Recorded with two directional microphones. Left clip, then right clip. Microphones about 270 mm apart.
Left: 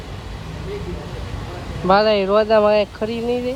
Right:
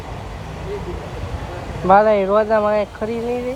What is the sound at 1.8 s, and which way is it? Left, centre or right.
Speech, left.